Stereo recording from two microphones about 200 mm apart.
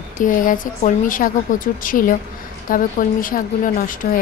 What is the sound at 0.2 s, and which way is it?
Speech, 40° left (ahead or behind).